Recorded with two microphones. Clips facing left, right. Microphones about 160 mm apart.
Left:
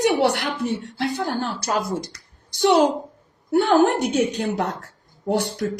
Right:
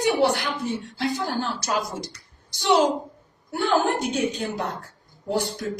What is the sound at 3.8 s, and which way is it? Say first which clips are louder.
Speech: left 5 dB; 70° left (ahead or behind).